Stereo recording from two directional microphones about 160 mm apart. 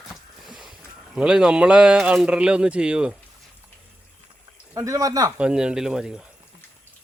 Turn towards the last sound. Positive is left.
turn(degrees=-5)  # may be behind; listen again after turning